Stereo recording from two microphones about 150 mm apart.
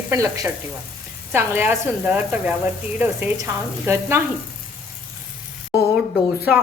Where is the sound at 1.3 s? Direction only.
15° right (ahead or behind).